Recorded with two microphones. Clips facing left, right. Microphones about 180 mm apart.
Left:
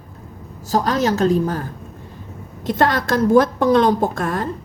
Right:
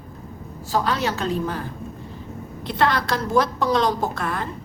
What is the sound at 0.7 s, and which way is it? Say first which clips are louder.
Speech: left 5 dB; 40° left (ahead or behind).